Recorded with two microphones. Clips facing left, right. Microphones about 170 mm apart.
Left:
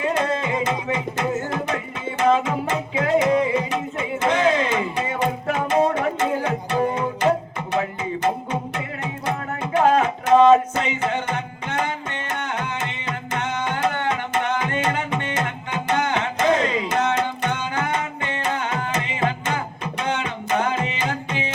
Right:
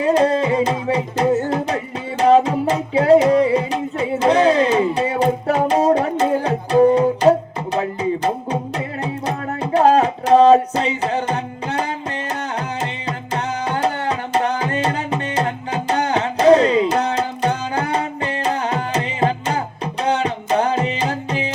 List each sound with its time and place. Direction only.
0.0 s music: 35° right (ahead or behind)